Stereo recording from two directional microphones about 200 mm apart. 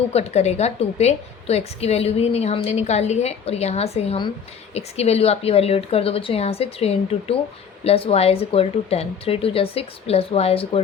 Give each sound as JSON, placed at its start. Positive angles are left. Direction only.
{"t": 0.1, "sound": "a woman's voice", "side_deg": 30}